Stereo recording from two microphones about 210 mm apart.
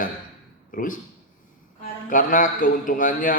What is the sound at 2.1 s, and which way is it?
A man's voice, 40° left (ahead or behind).